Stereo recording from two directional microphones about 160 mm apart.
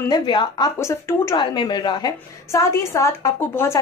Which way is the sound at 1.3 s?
30° left (ahead or behind).